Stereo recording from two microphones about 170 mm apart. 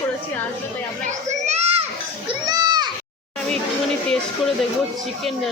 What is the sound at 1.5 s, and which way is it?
Children playing, 40° right (ahead or behind).